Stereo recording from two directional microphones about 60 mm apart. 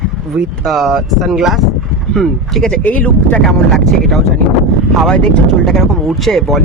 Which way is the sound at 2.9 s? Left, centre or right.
Left.